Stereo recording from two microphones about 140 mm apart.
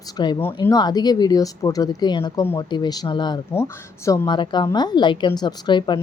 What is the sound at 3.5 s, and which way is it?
Speech, 20° left (ahead or behind).